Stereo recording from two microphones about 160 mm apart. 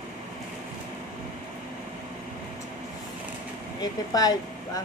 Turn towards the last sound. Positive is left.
turn(degrees=25)  # may be behind; listen again after turning